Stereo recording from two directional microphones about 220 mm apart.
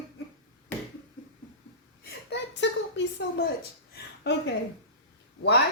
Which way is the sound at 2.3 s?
55° left (ahead or behind).